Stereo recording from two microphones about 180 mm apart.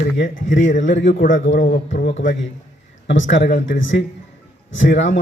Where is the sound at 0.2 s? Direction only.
90° left.